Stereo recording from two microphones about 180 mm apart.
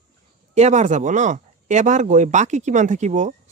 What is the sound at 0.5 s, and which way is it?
Speech, 40° right (ahead or behind).